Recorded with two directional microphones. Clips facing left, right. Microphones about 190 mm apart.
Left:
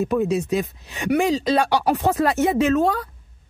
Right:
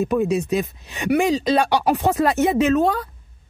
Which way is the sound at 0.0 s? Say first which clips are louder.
Right 1 dB; 15° right (ahead or behind).